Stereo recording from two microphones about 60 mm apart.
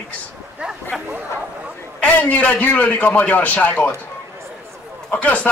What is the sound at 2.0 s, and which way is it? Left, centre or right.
Speech, left.